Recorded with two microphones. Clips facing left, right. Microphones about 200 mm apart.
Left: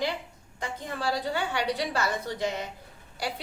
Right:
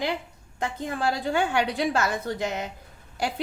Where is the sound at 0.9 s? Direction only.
50° right (ahead or behind).